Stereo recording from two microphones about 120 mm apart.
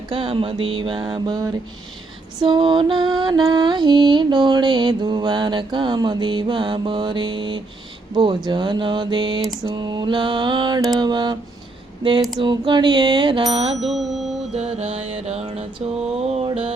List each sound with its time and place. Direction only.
0.1 s a sound: 50° right (ahead or behind)
2.4 s music: 45° right (ahead or behind)
12.4 s music: 40° right (ahead or behind)
13.5 s mantra: 60° right (ahead or behind)
13.7 s bicycle bell: centre (ahead or behind)
14.5 s mantra: 65° right (ahead or behind)